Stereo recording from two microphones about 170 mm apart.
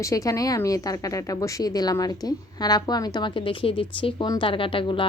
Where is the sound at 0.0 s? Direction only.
20° left (ahead or behind).